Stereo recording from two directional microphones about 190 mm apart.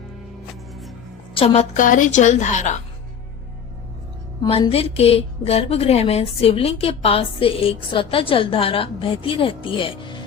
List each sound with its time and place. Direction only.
0.7 s music: centre (ahead or behind)
1.3 s a woman's voice: 30° left (ahead or behind)
4.4 s a woman's voice: 30° left (ahead or behind)